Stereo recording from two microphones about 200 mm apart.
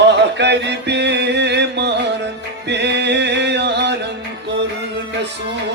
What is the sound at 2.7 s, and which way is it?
Music, 60° right (ahead or behind).